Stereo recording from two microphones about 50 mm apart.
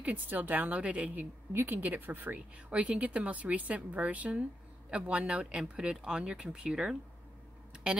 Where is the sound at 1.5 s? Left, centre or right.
Right.